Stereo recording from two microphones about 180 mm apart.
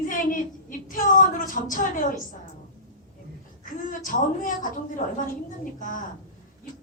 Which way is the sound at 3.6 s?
50° left (ahead or behind).